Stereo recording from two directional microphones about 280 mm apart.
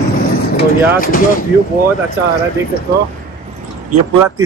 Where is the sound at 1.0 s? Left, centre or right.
Left.